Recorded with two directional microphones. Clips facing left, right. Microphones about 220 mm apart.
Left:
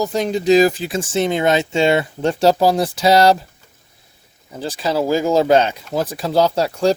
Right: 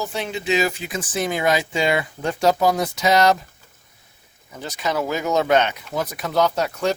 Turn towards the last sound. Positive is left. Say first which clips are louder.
# left 5 dB
turn(degrees=30)  # may be behind; listen again after turning